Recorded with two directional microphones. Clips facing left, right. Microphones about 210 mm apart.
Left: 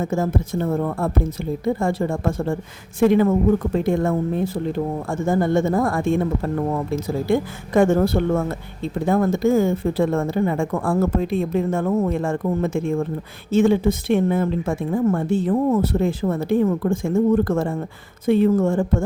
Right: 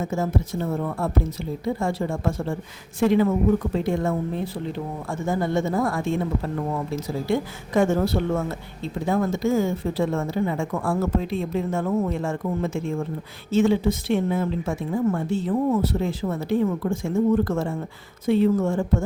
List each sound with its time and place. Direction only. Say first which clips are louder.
0.0 s speech: left 3 dB; 55° left (ahead or behind)